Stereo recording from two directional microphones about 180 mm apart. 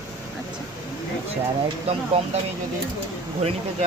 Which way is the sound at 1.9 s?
35° right (ahead or behind).